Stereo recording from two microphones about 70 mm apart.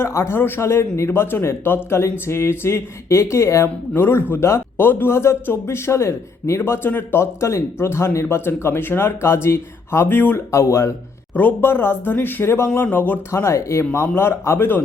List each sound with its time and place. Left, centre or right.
0.0 s speech: left
11.3 s speech: left
13.4 s speech: left